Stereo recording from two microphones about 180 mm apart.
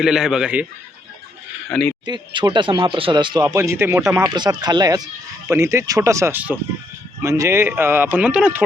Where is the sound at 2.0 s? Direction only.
25° right (ahead or behind).